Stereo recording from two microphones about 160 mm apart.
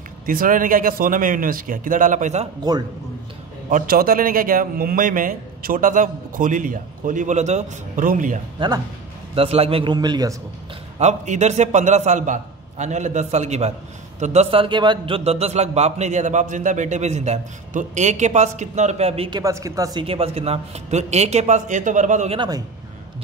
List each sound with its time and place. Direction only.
0.3 s a man's voice: 60° right (ahead or behind)
2.6 s a man's voice: 25° right (ahead or behind)
3.7 s a man's voice: 65° right (ahead or behind)
8.5 s a man's voice: 25° right (ahead or behind)
9.3 s a man's voice: 35° right (ahead or behind)
9.9 s a man's voice: 25° right (ahead or behind)
11.0 s a man's voice: 45° right (ahead or behind)
19.4 s a man's voice: 20° right (ahead or behind); by 22.4 s 50° right (ahead or behind)